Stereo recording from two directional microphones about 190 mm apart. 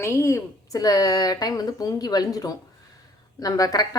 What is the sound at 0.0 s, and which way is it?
A woman's voice, 15° left (ahead or behind).